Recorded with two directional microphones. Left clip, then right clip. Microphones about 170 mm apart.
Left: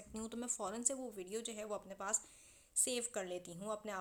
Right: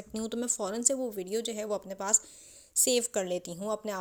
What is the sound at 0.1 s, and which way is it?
A woman's voice, 35° right (ahead or behind).